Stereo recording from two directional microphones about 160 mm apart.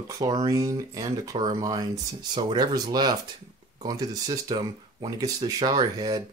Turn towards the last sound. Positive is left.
turn(degrees=-25)  # may be behind; listen again after turning